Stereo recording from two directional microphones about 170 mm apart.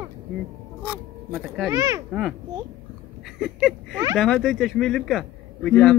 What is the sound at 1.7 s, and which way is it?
Speech, 20° right (ahead or behind).